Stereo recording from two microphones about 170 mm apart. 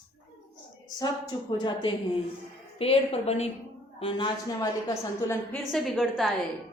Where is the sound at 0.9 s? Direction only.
25° left (ahead or behind).